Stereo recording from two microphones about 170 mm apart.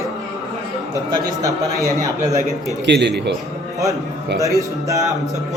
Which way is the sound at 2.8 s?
90° right.